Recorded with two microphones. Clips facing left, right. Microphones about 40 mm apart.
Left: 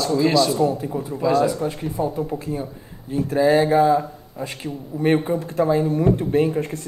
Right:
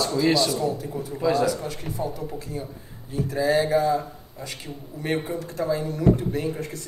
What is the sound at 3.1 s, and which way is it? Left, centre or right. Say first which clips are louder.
Speech: left 5 dB; left.